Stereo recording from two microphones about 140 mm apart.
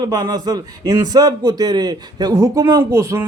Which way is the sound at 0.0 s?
30° right (ahead or behind).